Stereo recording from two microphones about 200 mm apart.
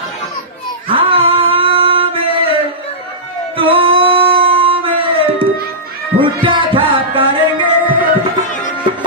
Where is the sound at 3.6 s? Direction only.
25° right (ahead or behind).